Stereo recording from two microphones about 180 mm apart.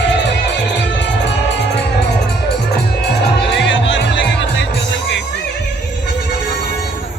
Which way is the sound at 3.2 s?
75° left (ahead or behind).